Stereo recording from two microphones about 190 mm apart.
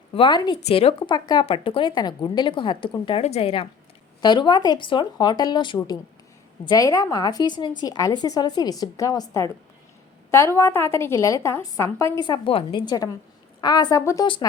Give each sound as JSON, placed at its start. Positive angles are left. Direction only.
{"t": 0.1, "sound": "a woman's voice", "side_deg": 25}